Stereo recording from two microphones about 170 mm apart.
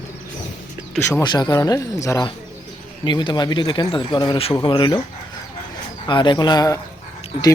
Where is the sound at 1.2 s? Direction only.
25° left (ahead or behind).